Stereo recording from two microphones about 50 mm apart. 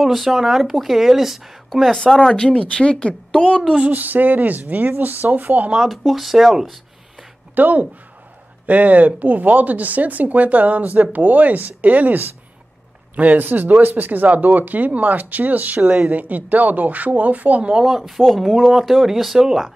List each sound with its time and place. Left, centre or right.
0.0 s a woman's voice: centre
2.1 s a woman's voice: centre
3.9 s speech: right
5.8 s speech: centre
7.5 s speech: right
15.8 s a woman's voice: centre
16.1 s speech: right
17.7 s speech: centre